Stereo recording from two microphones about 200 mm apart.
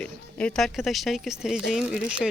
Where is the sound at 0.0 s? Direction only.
5° left (ahead or behind).